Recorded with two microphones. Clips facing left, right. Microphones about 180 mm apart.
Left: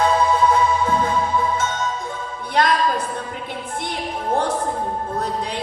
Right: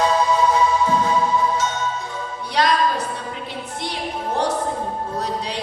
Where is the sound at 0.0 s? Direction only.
55° left (ahead or behind).